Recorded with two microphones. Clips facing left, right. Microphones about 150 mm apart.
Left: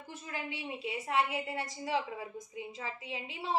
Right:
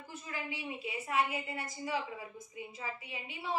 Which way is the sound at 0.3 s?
60° left (ahead or behind).